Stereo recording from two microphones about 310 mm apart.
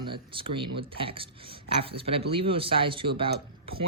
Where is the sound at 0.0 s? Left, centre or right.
Centre.